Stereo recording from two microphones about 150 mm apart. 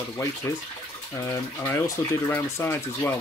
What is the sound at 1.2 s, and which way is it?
Speech, 20° left (ahead or behind).